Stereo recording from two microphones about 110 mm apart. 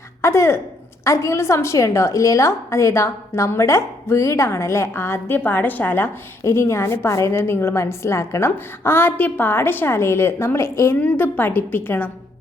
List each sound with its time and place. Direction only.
0.2 s a woman's voice: 25° left (ahead or behind)